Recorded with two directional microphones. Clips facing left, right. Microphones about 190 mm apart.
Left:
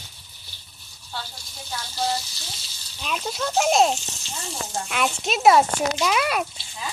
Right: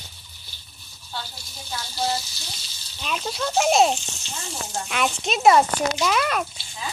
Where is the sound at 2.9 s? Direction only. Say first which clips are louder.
Even; centre (ahead or behind).